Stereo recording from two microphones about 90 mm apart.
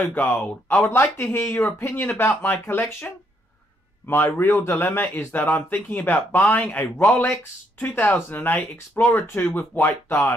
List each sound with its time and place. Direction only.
0.1 s a man's voice: 20° left (ahead or behind)
4.1 s a man's voice: 25° left (ahead or behind)